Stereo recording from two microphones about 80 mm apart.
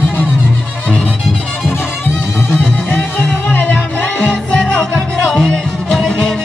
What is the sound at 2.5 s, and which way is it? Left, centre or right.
Music, left.